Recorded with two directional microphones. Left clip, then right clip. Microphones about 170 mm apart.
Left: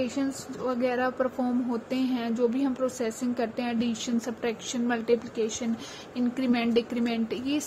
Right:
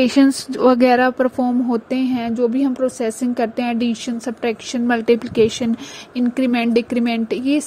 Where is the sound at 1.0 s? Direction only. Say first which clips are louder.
Right 10 dB; 45° right (ahead or behind).